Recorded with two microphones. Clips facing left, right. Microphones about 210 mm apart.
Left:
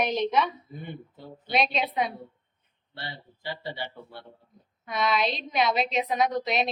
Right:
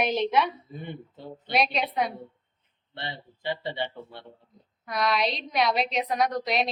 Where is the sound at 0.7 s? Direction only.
20° right (ahead or behind).